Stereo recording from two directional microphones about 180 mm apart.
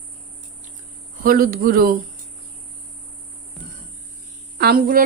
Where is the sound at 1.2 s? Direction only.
55° right (ahead or behind).